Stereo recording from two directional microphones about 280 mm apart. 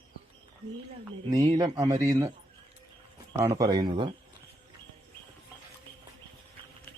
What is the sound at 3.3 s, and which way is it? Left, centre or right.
Speech, centre.